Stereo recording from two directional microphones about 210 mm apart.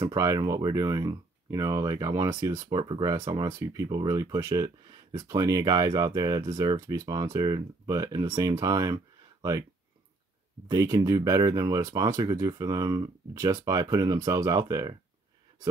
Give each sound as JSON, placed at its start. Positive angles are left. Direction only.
{"t": 0.0, "sound": "speech", "side_deg": -15}
{"t": 10.7, "sound": "speech", "side_deg": -15}